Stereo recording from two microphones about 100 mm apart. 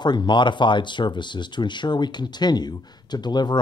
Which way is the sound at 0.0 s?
50° left (ahead or behind).